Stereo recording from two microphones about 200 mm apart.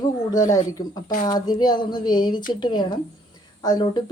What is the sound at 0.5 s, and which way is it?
Speech, 15° left (ahead or behind).